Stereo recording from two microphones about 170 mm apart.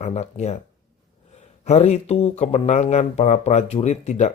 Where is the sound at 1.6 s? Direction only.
40° left (ahead or behind).